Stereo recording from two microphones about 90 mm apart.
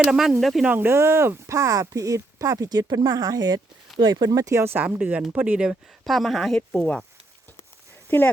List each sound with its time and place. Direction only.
0.1 s speech: centre (ahead or behind)
0.7 s speech: 25° right (ahead or behind); by 4.6 s 40° right (ahead or behind)
4.6 s speech: 25° right (ahead or behind)
6.1 s speech: centre (ahead or behind)